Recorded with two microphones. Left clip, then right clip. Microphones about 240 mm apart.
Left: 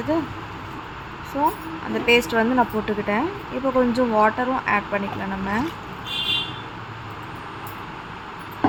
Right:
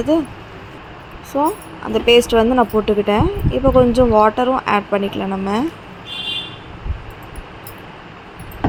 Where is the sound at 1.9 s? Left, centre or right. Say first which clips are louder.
Right 7 dB; right.